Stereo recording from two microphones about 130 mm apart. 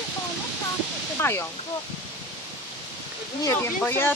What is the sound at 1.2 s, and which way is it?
Speech, 20° left (ahead or behind).